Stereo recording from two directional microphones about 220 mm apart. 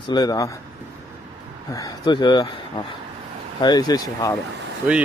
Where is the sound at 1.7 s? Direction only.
15° left (ahead or behind).